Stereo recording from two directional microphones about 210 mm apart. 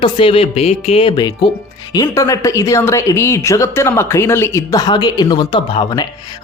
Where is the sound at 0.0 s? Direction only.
25° left (ahead or behind).